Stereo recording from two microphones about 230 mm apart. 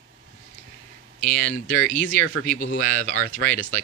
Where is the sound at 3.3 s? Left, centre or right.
Centre.